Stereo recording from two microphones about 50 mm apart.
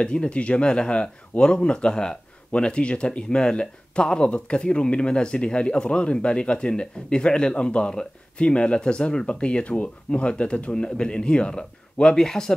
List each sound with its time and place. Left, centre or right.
0.0 s speech: left